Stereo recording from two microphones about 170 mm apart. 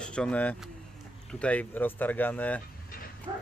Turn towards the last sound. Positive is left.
turn(degrees=-25)  # may be behind; listen again after turning